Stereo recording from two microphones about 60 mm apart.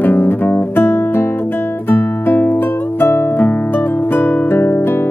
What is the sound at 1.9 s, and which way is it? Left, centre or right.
Music, left.